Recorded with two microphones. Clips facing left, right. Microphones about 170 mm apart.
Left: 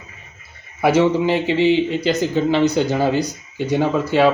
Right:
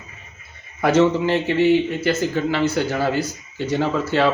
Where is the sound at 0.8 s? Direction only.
10° left (ahead or behind).